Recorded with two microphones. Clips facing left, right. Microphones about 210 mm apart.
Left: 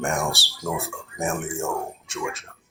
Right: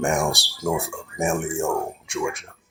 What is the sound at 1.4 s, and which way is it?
Speech, centre (ahead or behind).